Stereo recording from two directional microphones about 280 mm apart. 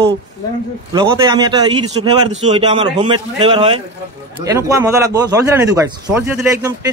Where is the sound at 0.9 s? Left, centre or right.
Centre.